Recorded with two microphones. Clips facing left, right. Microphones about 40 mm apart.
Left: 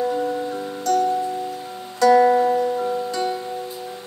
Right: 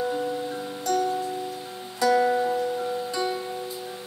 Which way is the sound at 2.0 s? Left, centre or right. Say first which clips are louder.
Left 7 dB; centre.